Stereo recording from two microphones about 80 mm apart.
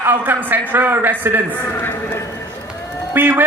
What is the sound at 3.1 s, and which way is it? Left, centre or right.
Speech, right.